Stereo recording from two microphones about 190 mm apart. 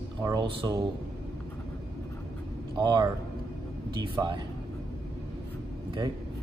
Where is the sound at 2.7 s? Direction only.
20° right (ahead or behind).